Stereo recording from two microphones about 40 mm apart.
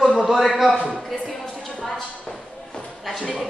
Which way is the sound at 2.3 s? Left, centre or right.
Left.